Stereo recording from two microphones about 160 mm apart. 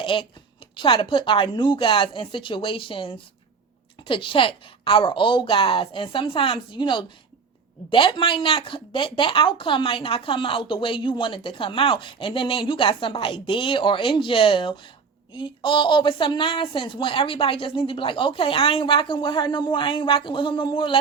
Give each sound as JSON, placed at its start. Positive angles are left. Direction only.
{"t": 0.0, "sound": "a woman's voice", "side_deg": 35}